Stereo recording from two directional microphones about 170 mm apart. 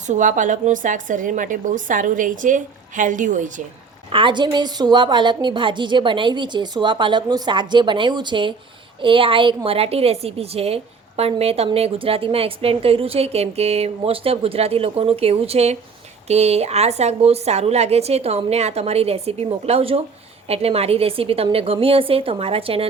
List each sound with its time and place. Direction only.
0.1 s a woman's voice: 45° right (ahead or behind)
4.1 s a woman's voice: 30° right (ahead or behind)